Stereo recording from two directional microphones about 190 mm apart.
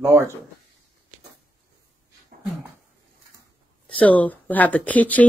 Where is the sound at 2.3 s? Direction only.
50° right (ahead or behind).